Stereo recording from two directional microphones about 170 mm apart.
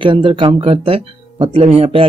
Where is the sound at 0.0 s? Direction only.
30° right (ahead or behind).